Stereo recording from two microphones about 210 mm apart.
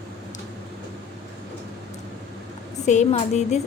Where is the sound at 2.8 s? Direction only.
35° left (ahead or behind).